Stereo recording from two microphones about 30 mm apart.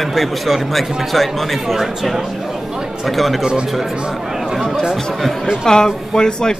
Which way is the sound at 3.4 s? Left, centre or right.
Right.